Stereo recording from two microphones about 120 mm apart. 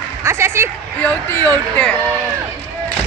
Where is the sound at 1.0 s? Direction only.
15° left (ahead or behind).